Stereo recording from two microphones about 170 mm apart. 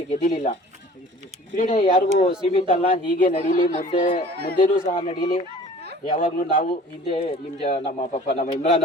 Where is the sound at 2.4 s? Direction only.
35° left (ahead or behind).